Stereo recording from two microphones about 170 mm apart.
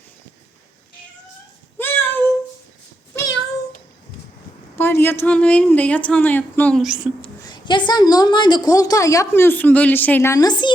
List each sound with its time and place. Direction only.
1.8 s a sound: 15° left (ahead or behind)
4.8 s a woman's voice: 15° left (ahead or behind)
6.8 s speech: 5° right (ahead or behind)
7.4 s a woman's voice: 25° left (ahead or behind)